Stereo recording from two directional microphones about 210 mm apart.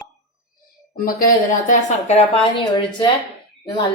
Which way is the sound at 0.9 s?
45° left (ahead or behind).